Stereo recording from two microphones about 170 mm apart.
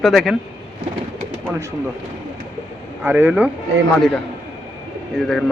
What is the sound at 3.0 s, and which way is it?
Speech, 10° right (ahead or behind).